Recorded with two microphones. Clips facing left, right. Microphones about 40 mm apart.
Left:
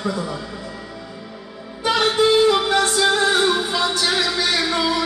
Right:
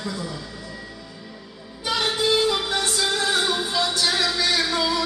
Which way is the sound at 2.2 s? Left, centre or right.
Left.